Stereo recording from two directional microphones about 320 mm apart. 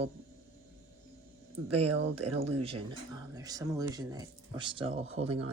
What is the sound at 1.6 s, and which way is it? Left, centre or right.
Speech, right.